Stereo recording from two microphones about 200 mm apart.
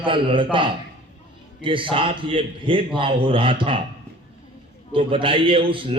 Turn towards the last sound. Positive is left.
turn(degrees=-25)  # may be behind; listen again after turning